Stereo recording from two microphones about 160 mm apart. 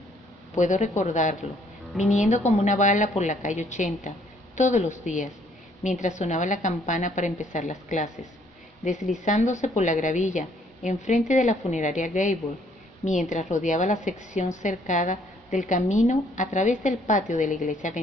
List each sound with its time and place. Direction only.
0.6 s a woman's voice: 45° left (ahead or behind)